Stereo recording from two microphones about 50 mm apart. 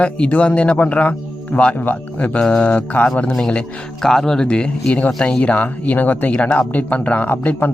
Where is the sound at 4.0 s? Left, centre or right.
Centre; by 6.3 s left.